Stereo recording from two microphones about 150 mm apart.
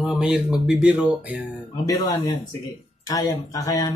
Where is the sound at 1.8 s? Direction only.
25° left (ahead or behind).